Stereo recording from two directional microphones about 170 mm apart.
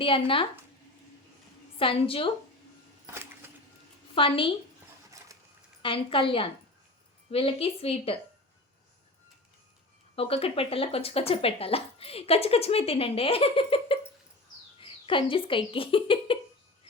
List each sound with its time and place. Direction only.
0.0 s speech: 30° left (ahead or behind)
1.8 s speech: 35° left (ahead or behind)
3.4 s a sound: 15° right (ahead or behind)
4.1 s speech: 30° left (ahead or behind)
5.8 s speech: 30° left (ahead or behind)
10.2 s speech: 35° left (ahead or behind)